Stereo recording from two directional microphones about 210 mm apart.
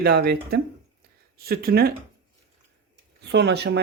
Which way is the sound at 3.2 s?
55° right (ahead or behind).